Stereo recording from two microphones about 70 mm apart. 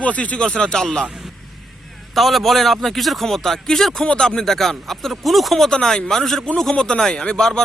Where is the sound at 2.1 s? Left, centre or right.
Centre.